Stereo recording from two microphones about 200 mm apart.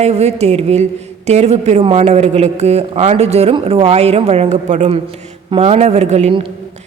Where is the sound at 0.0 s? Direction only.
30° right (ahead or behind).